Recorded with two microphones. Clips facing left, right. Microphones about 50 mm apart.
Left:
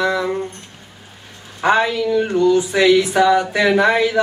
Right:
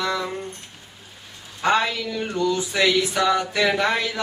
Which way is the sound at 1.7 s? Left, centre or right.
Centre.